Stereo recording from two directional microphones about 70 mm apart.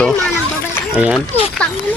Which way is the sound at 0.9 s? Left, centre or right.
Centre.